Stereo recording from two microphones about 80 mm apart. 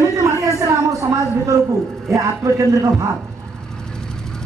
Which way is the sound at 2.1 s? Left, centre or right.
Right.